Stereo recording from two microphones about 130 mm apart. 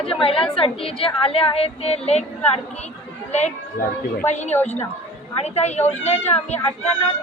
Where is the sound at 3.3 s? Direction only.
60° left (ahead or behind).